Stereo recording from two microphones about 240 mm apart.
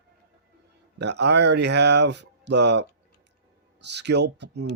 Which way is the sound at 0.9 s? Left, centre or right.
Right.